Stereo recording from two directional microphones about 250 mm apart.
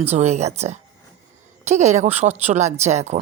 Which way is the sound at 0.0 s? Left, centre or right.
Right.